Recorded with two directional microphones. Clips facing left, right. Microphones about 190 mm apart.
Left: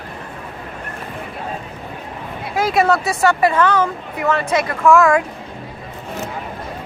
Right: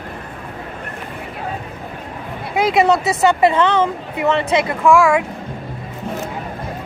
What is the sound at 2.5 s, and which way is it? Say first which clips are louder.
Speech: right 2 dB; 20° right (ahead or behind).